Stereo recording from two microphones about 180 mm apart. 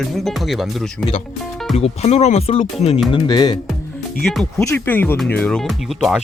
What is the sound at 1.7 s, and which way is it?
Speech, 35° left (ahead or behind).